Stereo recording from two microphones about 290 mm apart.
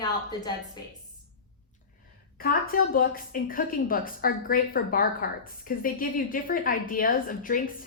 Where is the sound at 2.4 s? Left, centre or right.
Left.